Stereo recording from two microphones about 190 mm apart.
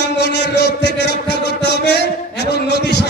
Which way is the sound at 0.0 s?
65° left (ahead or behind).